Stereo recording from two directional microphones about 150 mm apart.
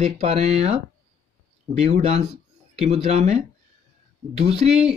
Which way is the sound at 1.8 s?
45° right (ahead or behind).